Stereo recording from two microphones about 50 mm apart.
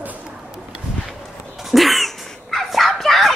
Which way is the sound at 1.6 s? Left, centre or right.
Centre.